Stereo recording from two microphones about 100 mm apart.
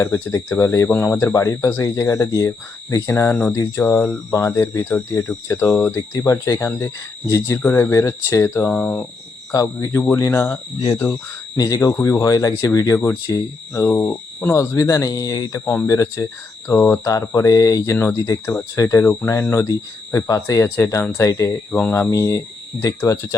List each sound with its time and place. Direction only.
0.0 s speech: 30° left (ahead or behind)
4.3 s speech: 30° left (ahead or behind)
8.6 s speech: 10° left (ahead or behind); by 10.6 s 25° left (ahead or behind)
11.5 s speech: 40° left (ahead or behind)
15.4 s speech: 25° left (ahead or behind)
17.9 s speech: 20° left (ahead or behind)
18.2 s speech: 30° left (ahead or behind)
21.7 s speech: 15° left (ahead or behind)
22.1 s speech: 30° left (ahead or behind)